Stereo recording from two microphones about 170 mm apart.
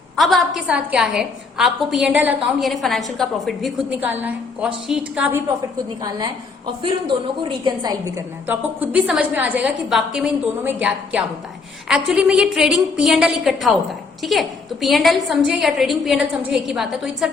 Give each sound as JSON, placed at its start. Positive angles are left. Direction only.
{"t": 0.2, "sound": "a woman's voice", "side_deg": 0}
{"t": 4.0, "sound": "a woman's voice", "side_deg": -10}
{"t": 6.0, "sound": "a woman's voice", "side_deg": -20}
{"t": 7.6, "sound": "a woman's voice", "side_deg": -25}